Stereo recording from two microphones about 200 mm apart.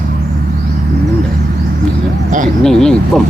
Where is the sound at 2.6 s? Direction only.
5° left (ahead or behind).